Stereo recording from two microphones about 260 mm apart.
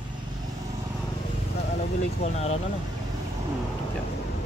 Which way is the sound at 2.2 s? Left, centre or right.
Left.